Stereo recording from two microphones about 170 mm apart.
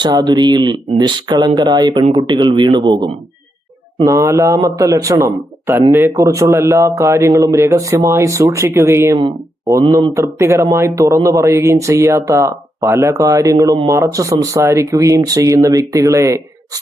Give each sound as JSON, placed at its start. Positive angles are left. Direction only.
{"t": 0.0, "sound": "speech", "side_deg": -25}